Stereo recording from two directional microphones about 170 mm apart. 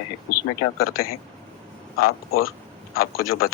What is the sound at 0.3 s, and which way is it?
Speech, 60° left (ahead or behind).